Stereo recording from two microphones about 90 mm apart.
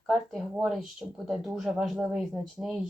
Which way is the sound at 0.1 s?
5° right (ahead or behind).